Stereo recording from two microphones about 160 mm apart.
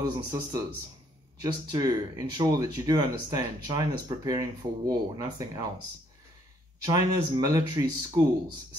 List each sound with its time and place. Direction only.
0.0 s speech: 25° right (ahead or behind)
6.9 s speech: 25° right (ahead or behind)